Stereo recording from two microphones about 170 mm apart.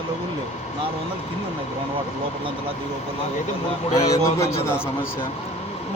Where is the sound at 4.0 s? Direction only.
20° left (ahead or behind).